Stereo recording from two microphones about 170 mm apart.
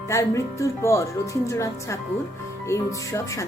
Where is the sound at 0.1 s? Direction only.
15° left (ahead or behind).